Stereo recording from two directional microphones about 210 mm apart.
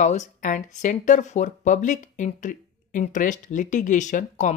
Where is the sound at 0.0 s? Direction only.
35° left (ahead or behind).